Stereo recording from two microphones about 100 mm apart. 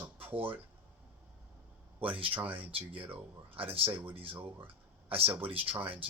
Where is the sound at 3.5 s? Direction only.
65° right (ahead or behind).